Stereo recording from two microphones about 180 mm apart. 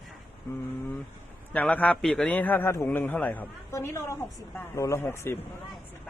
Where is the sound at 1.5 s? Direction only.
10° left (ahead or behind).